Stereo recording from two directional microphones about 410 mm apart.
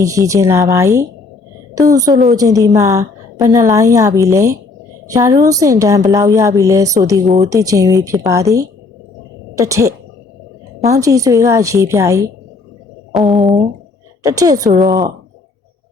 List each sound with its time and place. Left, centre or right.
0.0 s a woman's voice: centre
14.7 s speech: right